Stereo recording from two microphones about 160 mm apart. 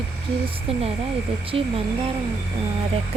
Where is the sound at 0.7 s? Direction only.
40° right (ahead or behind).